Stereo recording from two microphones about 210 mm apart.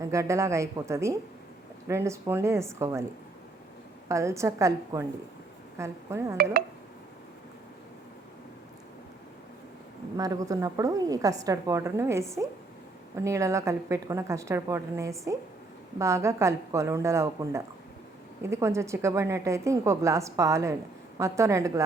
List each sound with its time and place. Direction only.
0.0 s a woman's voice: 15° right (ahead or behind)
4.1 s a woman's voice: 15° right (ahead or behind)
6.3 s speech: 45° right (ahead or behind)
10.2 s a woman's voice: 15° right (ahead or behind)